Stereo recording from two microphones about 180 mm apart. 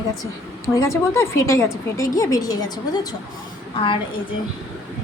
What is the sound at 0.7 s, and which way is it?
A woman's voice, 15° left (ahead or behind).